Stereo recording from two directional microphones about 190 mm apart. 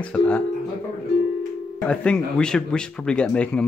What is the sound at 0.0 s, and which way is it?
Speech, 5° left (ahead or behind).